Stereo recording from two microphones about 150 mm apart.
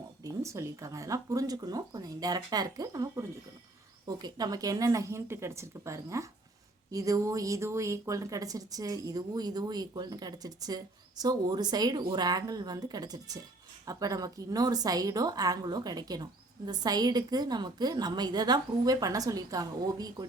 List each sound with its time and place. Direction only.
0.3 s speech: 20° right (ahead or behind)